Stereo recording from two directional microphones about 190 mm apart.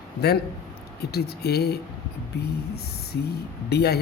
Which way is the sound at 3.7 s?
60° left (ahead or behind).